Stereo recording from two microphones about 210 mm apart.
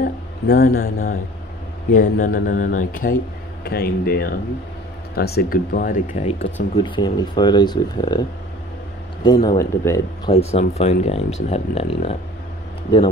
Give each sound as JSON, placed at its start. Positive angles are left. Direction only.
{"t": 0.0, "sound": "speech", "side_deg": 45}
{"t": 1.9, "sound": "speech", "side_deg": 35}
{"t": 10.5, "sound": "speech", "side_deg": 30}